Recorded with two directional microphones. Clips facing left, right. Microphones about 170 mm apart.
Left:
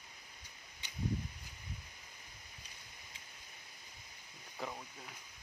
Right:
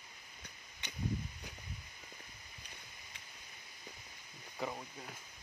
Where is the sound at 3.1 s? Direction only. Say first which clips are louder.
Right 1 dB; 65° right (ahead or behind).